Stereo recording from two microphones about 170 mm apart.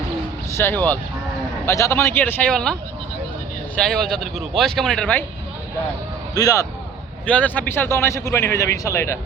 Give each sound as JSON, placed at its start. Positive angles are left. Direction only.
{"t": 0.5, "sound": "a man's voice", "side_deg": 10}
{"t": 3.8, "sound": "speech", "side_deg": 0}
{"t": 6.3, "sound": "speech", "side_deg": 20}
{"t": 7.3, "sound": "a man's voice", "side_deg": 10}